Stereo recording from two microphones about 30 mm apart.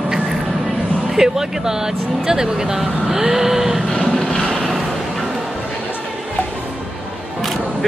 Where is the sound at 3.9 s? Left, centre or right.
Centre.